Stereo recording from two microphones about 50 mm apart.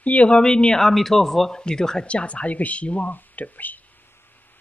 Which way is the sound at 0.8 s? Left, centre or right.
Centre.